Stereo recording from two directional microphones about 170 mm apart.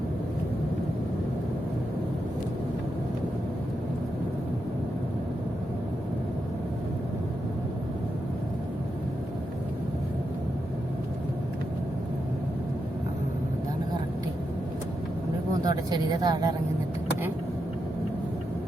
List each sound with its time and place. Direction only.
15.6 s a woman's voice: 25° right (ahead or behind)